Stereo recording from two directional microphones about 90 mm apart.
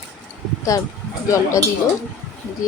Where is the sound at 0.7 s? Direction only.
40° left (ahead or behind).